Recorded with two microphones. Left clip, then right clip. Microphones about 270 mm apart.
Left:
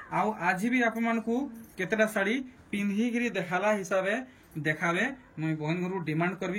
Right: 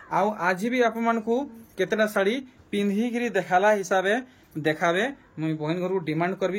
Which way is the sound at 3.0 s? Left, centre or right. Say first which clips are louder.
Right 3 dB; right.